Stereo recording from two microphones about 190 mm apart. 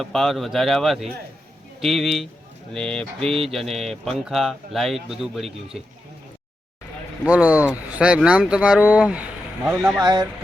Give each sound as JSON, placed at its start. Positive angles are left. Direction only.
{"t": 0.0, "sound": "speech", "side_deg": 0}
{"t": 7.3, "sound": "speech", "side_deg": -5}
{"t": 10.0, "sound": "speech", "side_deg": -20}